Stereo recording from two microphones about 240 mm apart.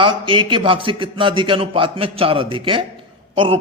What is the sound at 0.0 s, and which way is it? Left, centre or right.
A man's voice, centre.